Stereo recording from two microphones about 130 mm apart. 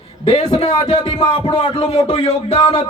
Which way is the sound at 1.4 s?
40° left (ahead or behind).